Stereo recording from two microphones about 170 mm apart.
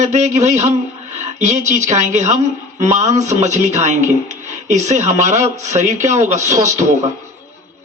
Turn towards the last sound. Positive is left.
turn(degrees=-45)  # may be behind; listen again after turning